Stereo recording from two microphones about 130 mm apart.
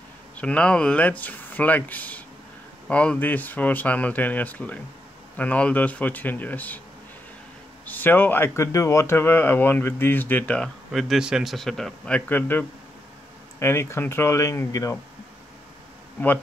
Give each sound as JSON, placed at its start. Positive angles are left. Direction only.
{"t": 0.4, "sound": "speech", "side_deg": 10}
{"t": 7.8, "sound": "speech", "side_deg": 15}
{"t": 10.9, "sound": "a man's voice", "side_deg": 0}
{"t": 12.3, "sound": "speech", "side_deg": 15}